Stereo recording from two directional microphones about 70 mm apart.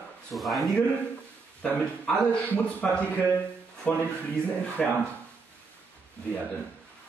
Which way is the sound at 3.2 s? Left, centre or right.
Left.